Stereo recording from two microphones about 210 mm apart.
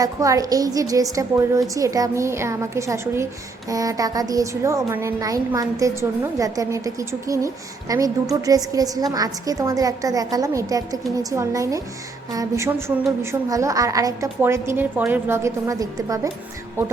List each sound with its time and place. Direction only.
0.0 s speech: 15° right (ahead or behind)